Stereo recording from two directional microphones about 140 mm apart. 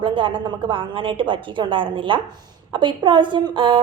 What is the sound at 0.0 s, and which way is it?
A woman's voice, 35° right (ahead or behind).